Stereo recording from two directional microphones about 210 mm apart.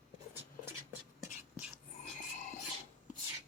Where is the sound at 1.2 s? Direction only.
5° right (ahead or behind).